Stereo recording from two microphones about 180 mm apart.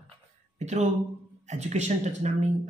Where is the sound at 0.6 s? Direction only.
40° right (ahead or behind).